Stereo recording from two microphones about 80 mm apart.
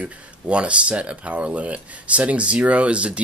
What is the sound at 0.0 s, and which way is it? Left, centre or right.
Speech, centre.